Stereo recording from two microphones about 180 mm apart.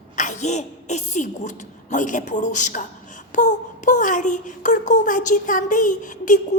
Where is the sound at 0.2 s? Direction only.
40° left (ahead or behind).